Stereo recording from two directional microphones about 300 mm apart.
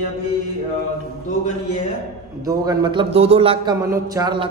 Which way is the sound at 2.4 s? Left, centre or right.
Centre.